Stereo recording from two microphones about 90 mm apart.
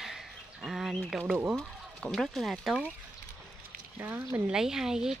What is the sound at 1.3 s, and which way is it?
Speech, 25° right (ahead or behind).